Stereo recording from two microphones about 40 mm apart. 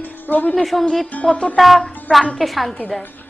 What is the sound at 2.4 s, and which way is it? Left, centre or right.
Speech, centre.